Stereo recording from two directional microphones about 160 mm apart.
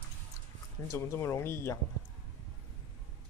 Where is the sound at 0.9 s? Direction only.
15° left (ahead or behind).